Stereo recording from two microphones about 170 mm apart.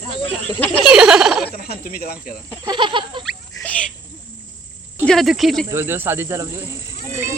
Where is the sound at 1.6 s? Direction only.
60° left (ahead or behind).